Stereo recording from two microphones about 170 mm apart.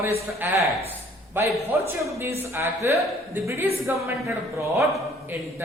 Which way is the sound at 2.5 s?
15° right (ahead or behind).